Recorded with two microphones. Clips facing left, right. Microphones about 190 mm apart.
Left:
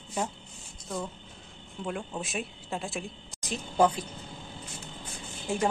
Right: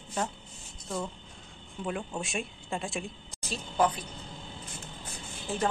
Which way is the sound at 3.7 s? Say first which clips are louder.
Left 3 dB; 30° left (ahead or behind).